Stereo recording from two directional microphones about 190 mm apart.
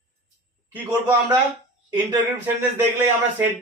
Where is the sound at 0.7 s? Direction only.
10° right (ahead or behind).